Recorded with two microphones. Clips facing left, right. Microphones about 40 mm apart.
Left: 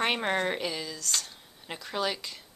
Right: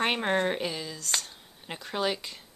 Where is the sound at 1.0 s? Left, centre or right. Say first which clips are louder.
Right 1 dB; right.